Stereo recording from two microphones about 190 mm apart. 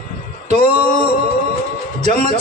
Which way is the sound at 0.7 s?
30° right (ahead or behind).